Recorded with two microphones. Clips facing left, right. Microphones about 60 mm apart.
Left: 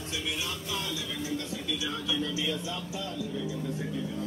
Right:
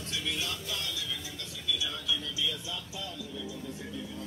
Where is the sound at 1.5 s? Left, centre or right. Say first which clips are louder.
Left 3 dB; left.